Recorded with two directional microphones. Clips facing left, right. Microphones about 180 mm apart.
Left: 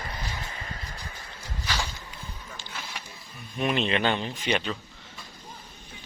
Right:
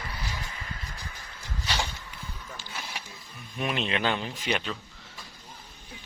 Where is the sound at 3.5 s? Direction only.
Centre (ahead or behind).